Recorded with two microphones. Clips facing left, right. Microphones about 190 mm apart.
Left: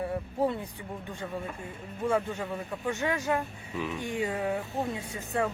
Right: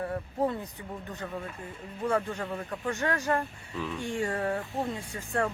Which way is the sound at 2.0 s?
5° left (ahead or behind).